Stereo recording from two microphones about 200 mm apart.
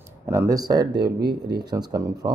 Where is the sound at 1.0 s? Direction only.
55° right (ahead or behind).